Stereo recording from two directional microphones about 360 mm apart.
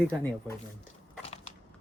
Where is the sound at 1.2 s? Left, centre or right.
Centre.